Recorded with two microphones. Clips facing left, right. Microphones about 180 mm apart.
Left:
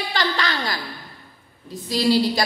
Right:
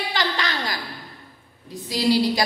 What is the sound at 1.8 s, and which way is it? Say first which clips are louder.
Speech: left 1 dB; 20° right (ahead or behind).